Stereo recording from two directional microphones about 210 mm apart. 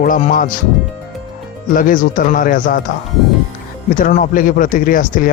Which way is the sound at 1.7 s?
40° left (ahead or behind).